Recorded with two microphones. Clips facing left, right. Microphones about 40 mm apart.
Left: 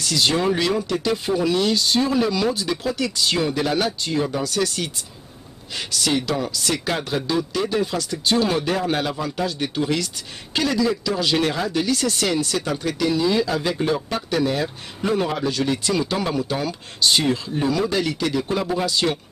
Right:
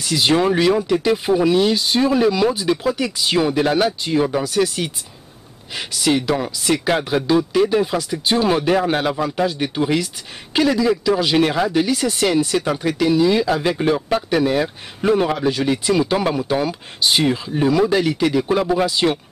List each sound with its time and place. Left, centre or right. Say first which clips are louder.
0.0 s speech: right 4 dB; centre